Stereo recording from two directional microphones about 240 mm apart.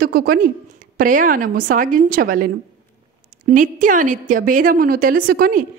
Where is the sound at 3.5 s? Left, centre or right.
Right.